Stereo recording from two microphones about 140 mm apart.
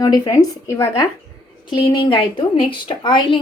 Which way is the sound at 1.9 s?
35° left (ahead or behind).